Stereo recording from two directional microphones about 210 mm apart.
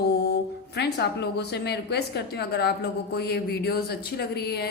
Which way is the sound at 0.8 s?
55° left (ahead or behind).